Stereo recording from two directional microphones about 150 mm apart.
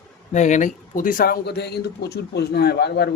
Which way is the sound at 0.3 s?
55° left (ahead or behind).